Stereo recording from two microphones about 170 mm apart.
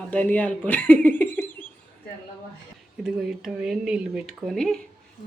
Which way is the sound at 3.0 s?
5° right (ahead or behind).